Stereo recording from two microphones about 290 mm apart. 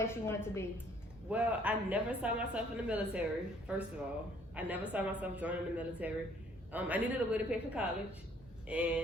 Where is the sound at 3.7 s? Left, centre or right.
Centre.